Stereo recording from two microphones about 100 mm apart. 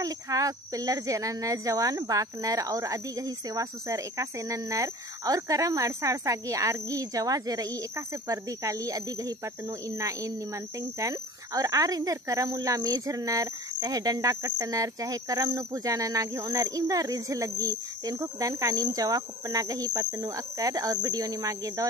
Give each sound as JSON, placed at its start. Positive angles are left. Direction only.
{"t": 0.0, "sound": "speech", "side_deg": -35}